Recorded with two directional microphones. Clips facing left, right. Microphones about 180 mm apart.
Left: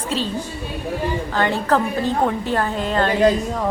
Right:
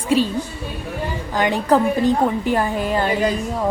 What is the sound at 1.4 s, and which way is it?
A woman's voice, 15° right (ahead or behind).